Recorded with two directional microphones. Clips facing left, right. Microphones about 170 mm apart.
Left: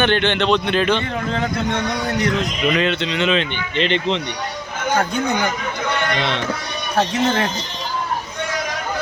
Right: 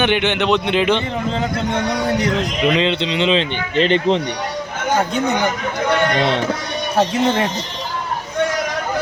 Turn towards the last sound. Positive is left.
turn(degrees=-15)  # may be behind; listen again after turning